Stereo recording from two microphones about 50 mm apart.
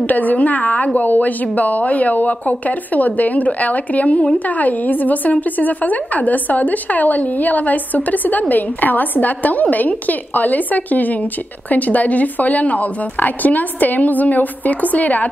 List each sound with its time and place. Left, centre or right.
0.1 s a woman's voice: left